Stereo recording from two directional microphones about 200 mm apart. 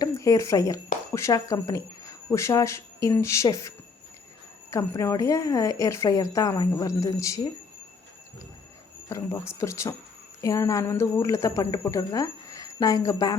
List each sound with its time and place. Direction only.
0.0 s speech: 15° left (ahead or behind)
4.7 s speech: 15° left (ahead or behind)
9.0 s speech: 15° left (ahead or behind)